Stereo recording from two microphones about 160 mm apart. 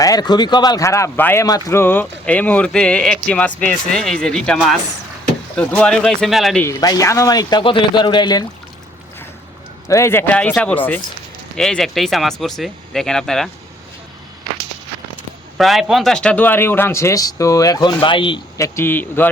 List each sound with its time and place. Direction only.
0.0 s speech: 25° left (ahead or behind); by 6.6 s centre (ahead or behind)
6.6 s speech: 20° left (ahead or behind)
9.9 s speech: 15° left (ahead or behind)
15.5 s speech: centre (ahead or behind); by 18.6 s 30° left (ahead or behind)
18.6 s speech: 15° left (ahead or behind)